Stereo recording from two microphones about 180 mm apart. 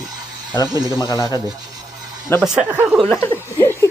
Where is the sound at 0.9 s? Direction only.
15° left (ahead or behind).